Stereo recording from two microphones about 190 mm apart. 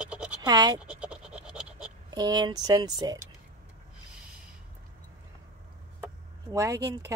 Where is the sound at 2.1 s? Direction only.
20° right (ahead or behind).